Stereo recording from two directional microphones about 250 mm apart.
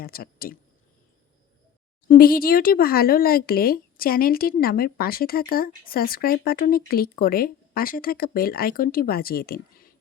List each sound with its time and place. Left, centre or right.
0.0 s speech: left
2.0 s speech: left